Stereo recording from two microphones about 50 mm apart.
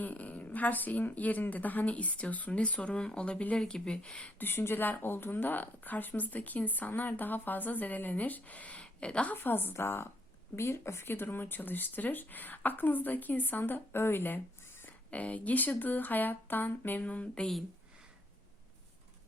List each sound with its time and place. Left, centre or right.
0.0 s speech: left
4.4 s speech: left
9.3 s a woman's voice: left
9.7 s speech: left
10.5 s speech: left
17.0 s speech: left